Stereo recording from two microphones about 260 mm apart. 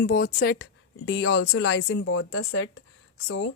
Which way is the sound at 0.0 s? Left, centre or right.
Left.